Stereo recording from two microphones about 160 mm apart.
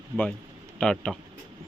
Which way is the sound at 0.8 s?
5° left (ahead or behind).